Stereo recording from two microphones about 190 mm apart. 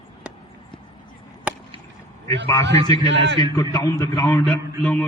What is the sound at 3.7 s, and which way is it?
A man's voice, 20° left (ahead or behind).